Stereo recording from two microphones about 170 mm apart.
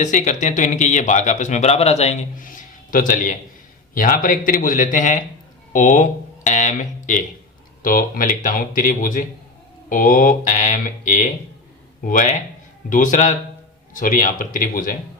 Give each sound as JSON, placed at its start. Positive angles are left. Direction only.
{"t": 0.0, "sound": "speech", "side_deg": 45}